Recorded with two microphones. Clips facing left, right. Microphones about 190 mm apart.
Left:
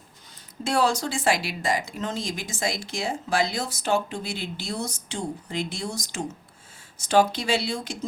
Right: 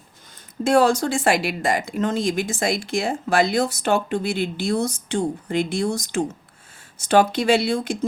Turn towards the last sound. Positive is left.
turn(degrees=-55)  # may be behind; listen again after turning